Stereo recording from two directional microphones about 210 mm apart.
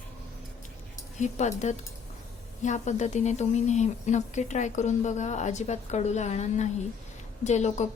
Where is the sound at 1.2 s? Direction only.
35° left (ahead or behind).